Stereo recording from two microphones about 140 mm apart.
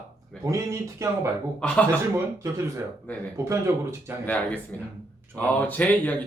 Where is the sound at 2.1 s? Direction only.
20° right (ahead or behind).